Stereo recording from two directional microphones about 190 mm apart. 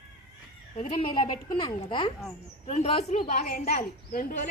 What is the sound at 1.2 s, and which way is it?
Speech, 25° left (ahead or behind).